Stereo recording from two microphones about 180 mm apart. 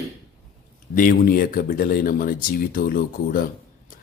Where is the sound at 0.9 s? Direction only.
50° left (ahead or behind).